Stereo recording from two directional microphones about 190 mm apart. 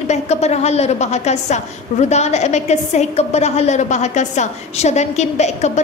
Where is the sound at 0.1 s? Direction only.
35° left (ahead or behind).